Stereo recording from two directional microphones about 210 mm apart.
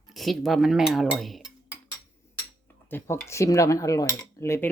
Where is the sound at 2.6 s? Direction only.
10° left (ahead or behind).